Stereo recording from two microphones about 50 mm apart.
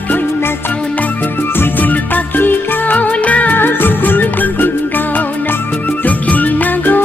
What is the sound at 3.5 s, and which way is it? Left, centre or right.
Music, left.